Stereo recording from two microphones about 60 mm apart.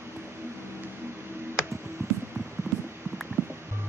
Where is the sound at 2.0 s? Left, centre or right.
Right.